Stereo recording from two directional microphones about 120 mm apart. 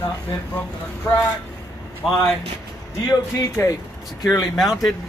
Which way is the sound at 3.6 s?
25° left (ahead or behind).